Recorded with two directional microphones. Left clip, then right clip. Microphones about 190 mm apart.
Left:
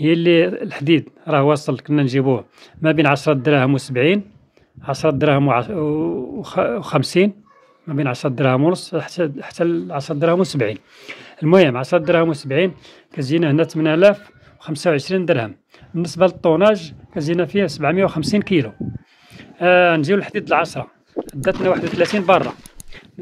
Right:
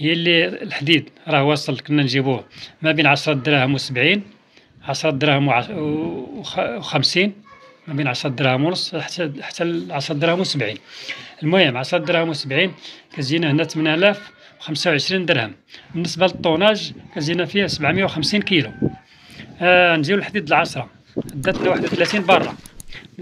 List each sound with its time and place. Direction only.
0.0 s speech: 50° left (ahead or behind)